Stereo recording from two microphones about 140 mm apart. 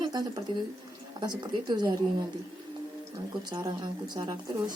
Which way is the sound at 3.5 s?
30° right (ahead or behind).